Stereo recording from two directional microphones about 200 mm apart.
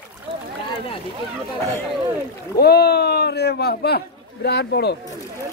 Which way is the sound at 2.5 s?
50° left (ahead or behind).